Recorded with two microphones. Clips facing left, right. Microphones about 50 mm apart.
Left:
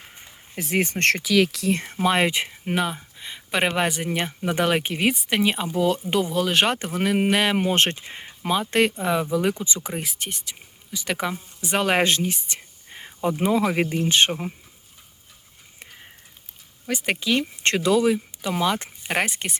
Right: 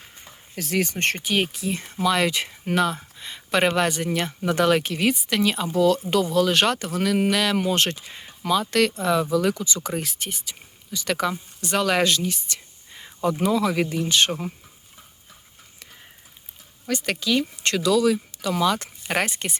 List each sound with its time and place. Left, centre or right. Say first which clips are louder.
0.5 s speech: left 1 dB; left
0.9 s speech: left 4 dB; left
1.7 s speech: right 1 dB; left; by 10.1 s centre
10.1 s speech: even; centre
11.9 s speech: left 1 dB; left
16.8 s speech: right 1 dB; centre
17.1 s a woman's voice: left 1 dB; left; by 19.5 s centre